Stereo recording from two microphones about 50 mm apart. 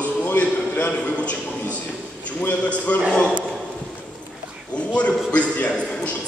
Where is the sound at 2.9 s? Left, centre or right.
Left.